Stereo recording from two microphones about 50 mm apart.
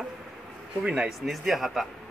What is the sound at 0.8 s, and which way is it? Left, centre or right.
Speech, centre.